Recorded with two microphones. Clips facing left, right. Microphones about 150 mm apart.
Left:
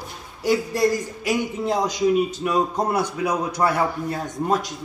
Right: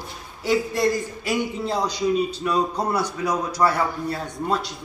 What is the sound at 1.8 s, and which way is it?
Speech, 45° left (ahead or behind).